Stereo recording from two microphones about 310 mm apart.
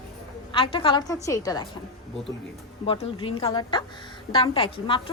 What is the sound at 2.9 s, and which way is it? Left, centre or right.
A woman's voice, centre.